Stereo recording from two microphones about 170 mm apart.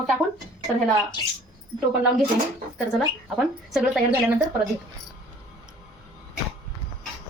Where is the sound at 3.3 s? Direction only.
Centre (ahead or behind).